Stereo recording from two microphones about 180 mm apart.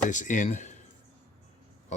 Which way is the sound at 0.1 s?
45° left (ahead or behind).